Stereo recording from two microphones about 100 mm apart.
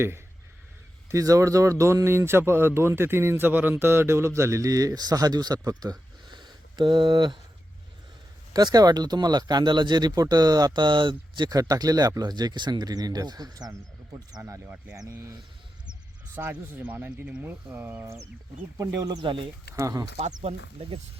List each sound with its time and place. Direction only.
1.1 s speech: 35° right (ahead or behind)
8.5 s speech: 40° right (ahead or behind); by 18.2 s 25° right (ahead or behind)
18.8 s speech: 35° right (ahead or behind)
19.2 s speech: 55° right (ahead or behind)
19.7 s speech: 35° right (ahead or behind)
20.4 s speech: 80° right